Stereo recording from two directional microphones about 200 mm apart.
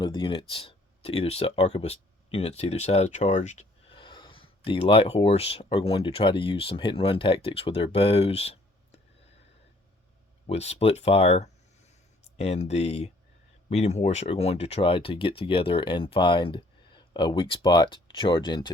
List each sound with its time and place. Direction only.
0.0 s speech: 25° left (ahead or behind)
10.4 s speech: 30° left (ahead or behind)